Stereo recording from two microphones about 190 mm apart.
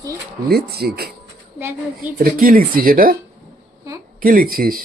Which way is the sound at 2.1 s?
50° right (ahead or behind).